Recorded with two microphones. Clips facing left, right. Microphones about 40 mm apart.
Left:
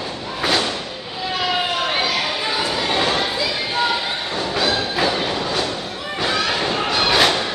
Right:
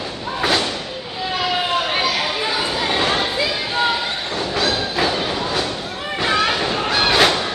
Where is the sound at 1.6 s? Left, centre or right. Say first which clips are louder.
Right 1 dB; centre.